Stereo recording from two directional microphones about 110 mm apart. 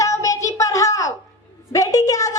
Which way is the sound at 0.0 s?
30° left (ahead or behind).